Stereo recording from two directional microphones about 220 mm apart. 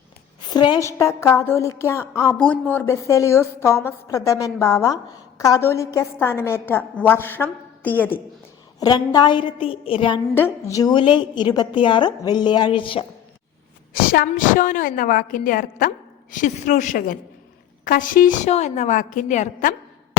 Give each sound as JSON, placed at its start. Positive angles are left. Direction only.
{"t": 0.5, "sound": "a woman's voice", "side_deg": 20}
{"t": 10.3, "sound": "a woman's voice", "side_deg": 10}
{"t": 14.0, "sound": "a woman's voice", "side_deg": 40}